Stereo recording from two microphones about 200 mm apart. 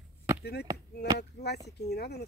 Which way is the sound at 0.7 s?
20° right (ahead or behind).